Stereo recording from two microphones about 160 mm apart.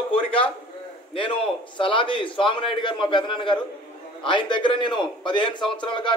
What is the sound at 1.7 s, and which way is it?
A man's voice, 30° left (ahead or behind).